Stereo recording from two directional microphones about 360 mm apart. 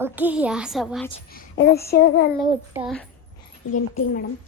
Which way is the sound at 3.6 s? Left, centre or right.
Left.